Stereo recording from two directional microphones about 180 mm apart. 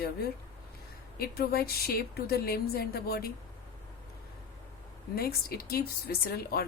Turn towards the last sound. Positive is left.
turn(degrees=60)  # may be behind; listen again after turning